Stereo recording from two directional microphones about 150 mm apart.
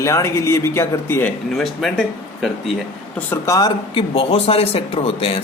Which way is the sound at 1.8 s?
Centre (ahead or behind).